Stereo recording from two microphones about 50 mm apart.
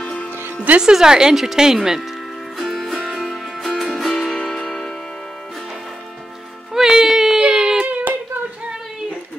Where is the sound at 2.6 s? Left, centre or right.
Centre.